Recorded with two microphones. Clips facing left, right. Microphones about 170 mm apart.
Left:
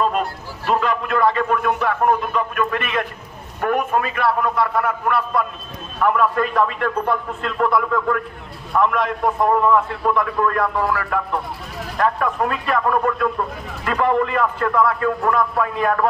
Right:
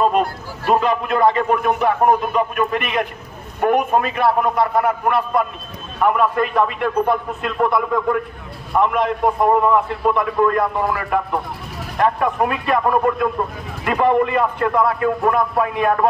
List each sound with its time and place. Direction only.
0.7 s a man's voice: 20° right (ahead or behind)